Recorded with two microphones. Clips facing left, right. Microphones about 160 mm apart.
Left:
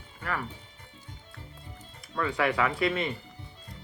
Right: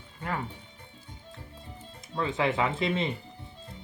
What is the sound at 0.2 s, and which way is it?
Speech, 25° right (ahead or behind).